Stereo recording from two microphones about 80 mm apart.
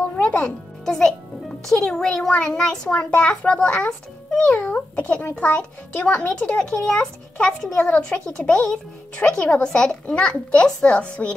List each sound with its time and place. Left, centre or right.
0.1 s music: centre
0.8 s a child's voice: centre